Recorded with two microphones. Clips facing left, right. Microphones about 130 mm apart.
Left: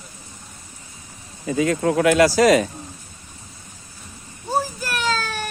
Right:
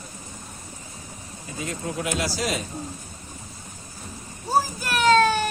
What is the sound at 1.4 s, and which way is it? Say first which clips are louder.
Speech: left 12 dB; 90° left.